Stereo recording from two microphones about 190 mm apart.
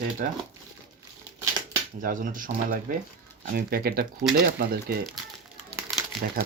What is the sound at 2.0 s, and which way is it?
Speech, 45° right (ahead or behind).